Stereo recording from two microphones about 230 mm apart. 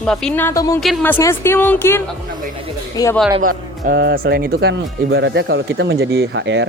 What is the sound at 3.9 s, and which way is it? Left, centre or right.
Speech, right.